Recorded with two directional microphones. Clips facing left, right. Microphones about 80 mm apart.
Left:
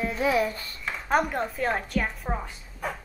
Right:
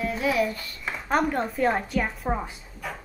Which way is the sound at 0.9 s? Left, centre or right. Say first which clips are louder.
Right 1 dB; centre.